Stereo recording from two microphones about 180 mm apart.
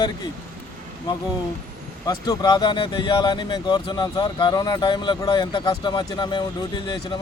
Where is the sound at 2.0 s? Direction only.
20° left (ahead or behind).